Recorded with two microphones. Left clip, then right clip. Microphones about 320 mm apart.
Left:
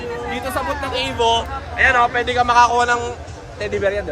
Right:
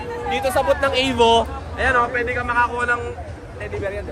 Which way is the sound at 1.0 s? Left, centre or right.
Right.